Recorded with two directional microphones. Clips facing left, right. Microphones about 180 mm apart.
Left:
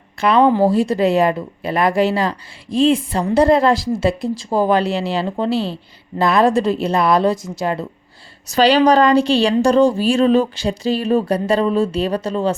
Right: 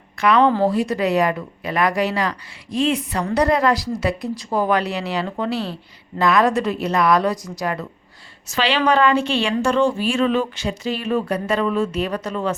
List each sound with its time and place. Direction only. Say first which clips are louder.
0.2 s speech: left 2 dB; 30° left (ahead or behind)
0.4 s speech: left 3 dB; 10° left (ahead or behind)
0.7 s speech: left 4 dB; 30° left (ahead or behind)
8.4 s a woman's voice: left 7 dB; 40° left (ahead or behind)